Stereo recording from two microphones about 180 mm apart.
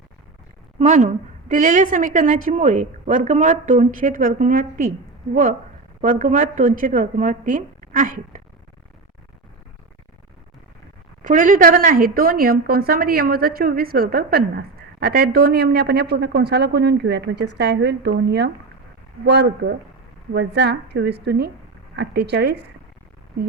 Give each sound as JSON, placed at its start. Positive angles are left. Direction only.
{"t": 0.8, "sound": "a woman's voice", "side_deg": -45}
{"t": 11.2, "sound": "a woman's voice", "side_deg": -45}